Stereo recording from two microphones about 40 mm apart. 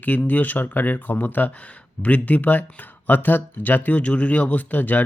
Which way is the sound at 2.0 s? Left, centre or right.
Left.